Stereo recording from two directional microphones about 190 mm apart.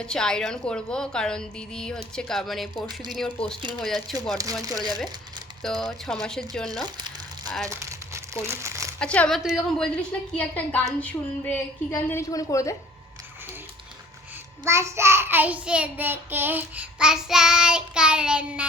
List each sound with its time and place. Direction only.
0.0 s a woman's voice: 5° left (ahead or behind)
5.6 s a woman's voice: centre (ahead or behind)
7.6 s crumpling: 15° right (ahead or behind)
8.4 s speech: 15° right (ahead or behind)
9.0 s a woman's voice: 5° left (ahead or behind)
14.6 s child singing: 15° right (ahead or behind)